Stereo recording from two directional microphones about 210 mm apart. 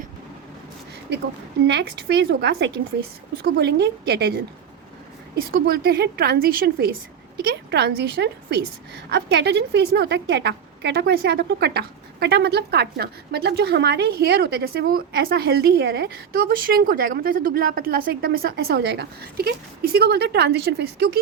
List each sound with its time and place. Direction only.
1.1 s a woman's voice: 55° right (ahead or behind)
5.5 s a woman's voice: 45° right (ahead or behind)